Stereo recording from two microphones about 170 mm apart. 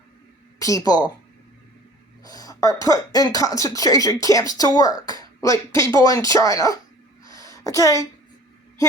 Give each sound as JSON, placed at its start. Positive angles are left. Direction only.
{"t": 0.6, "sound": "speech", "side_deg": 20}
{"t": 2.2, "sound": "speech", "side_deg": 20}
{"t": 7.3, "sound": "a sound", "side_deg": 20}